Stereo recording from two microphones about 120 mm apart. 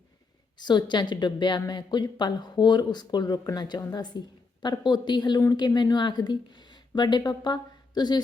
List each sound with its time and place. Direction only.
0.5 s a woman's voice: 35° left (ahead or behind)